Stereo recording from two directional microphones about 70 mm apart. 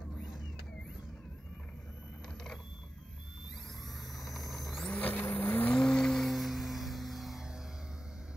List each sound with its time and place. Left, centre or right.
4.1 s engine: centre
4.8 s vehicle: left
5.7 s music: centre